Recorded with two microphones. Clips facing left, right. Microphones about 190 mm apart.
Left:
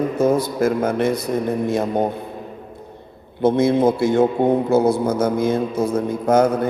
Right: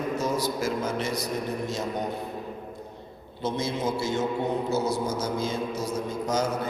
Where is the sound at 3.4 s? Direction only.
55° left (ahead or behind).